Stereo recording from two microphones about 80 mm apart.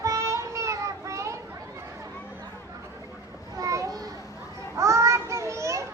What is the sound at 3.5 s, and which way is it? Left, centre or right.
Children playing, right.